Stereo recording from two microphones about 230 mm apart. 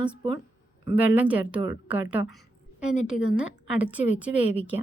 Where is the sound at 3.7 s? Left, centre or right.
Centre.